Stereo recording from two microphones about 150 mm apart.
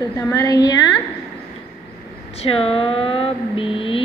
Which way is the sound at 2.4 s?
40° left (ahead or behind).